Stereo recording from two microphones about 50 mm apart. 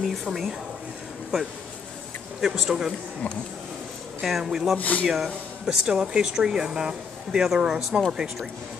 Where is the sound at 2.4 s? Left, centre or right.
Centre.